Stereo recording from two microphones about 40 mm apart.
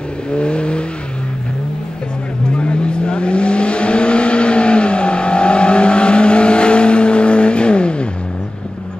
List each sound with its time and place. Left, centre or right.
0.3 s vehicle: left
2.5 s vehicle: left